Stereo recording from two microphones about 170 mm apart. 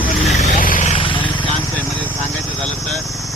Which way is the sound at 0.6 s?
45° left (ahead or behind).